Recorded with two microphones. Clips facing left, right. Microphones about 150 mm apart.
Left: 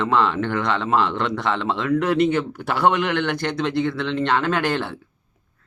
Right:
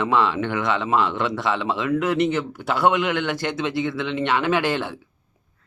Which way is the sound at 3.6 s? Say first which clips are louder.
Left 4 dB; 10° right (ahead or behind).